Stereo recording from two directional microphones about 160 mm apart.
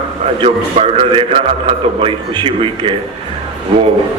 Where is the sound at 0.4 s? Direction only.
35° right (ahead or behind).